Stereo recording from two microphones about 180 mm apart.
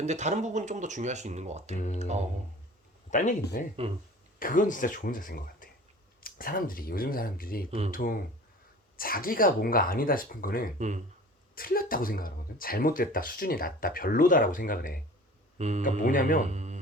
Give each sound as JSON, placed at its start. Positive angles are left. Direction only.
{"t": 0.0, "sound": "speech", "side_deg": -40}
{"t": 1.7, "sound": "speech", "side_deg": 40}
{"t": 3.1, "sound": "speech", "side_deg": 45}
{"t": 10.8, "sound": "speech", "side_deg": -40}
{"t": 11.5, "sound": "speech", "side_deg": 55}
{"t": 15.5, "sound": "speech", "side_deg": -35}
{"t": 16.0, "sound": "speech", "side_deg": 50}
{"t": 16.5, "sound": "music", "side_deg": -40}